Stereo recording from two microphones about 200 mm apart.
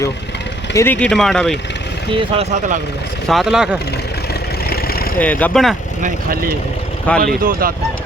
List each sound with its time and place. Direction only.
0.8 s speech: 10° left (ahead or behind)
2.1 s speech: 30° right (ahead or behind)
3.2 s speech: centre (ahead or behind)
4.7 s vehicle: 50° left (ahead or behind)
5.2 s speech: 10° left (ahead or behind)
6.0 s speech: 45° right (ahead or behind)
7.1 s speech: 5° left (ahead or behind)